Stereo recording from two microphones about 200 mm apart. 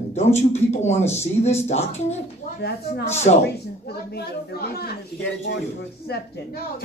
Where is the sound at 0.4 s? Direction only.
35° left (ahead or behind).